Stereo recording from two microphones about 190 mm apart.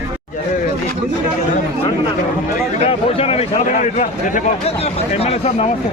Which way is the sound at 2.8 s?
30° left (ahead or behind).